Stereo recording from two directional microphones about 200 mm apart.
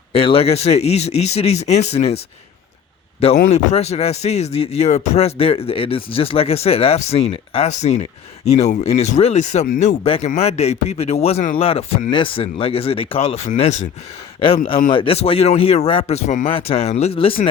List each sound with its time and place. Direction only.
0.1 s speech: 30° left (ahead or behind)
3.3 s a man's voice: 40° left (ahead or behind)
14.8 s a man's voice: 25° left (ahead or behind)